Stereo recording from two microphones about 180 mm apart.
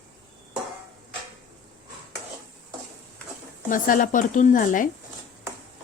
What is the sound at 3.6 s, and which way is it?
A woman's voice, 50° left (ahead or behind).